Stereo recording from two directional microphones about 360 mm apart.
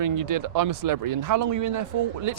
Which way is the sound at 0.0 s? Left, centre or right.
Right.